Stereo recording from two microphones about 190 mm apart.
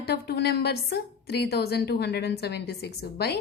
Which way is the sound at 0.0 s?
60° left (ahead or behind).